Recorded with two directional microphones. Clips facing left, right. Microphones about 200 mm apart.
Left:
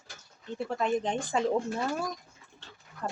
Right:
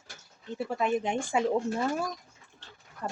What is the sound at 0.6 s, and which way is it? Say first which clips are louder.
Speech: right 1 dB; 10° right (ahead or behind).